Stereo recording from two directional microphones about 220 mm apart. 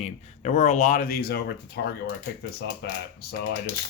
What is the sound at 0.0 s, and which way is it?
Speech, 30° left (ahead or behind).